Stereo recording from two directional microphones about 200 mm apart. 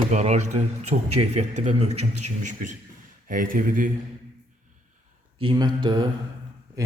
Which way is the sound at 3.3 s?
45° right (ahead or behind).